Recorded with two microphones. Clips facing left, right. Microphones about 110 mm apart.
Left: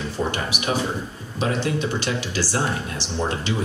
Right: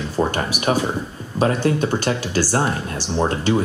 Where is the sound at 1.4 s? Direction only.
45° right (ahead or behind).